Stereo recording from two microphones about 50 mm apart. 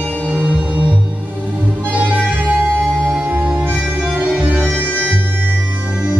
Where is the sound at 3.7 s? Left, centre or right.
Right.